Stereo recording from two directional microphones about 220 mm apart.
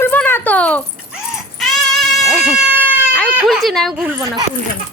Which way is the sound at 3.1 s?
Centre (ahead or behind).